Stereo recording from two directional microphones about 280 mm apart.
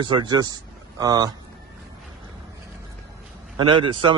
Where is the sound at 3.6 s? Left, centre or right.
Centre.